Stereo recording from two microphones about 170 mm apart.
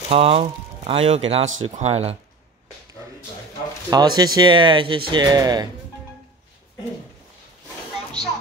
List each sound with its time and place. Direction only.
0.1 s speech: 35° right (ahead or behind)
3.9 s speech: 25° right (ahead or behind)